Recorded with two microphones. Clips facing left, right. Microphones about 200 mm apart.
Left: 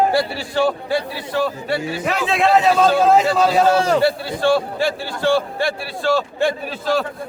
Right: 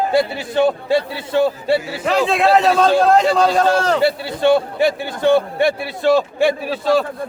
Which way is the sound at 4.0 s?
20° right (ahead or behind).